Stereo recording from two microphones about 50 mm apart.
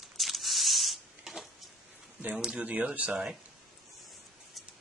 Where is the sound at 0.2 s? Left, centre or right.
Centre.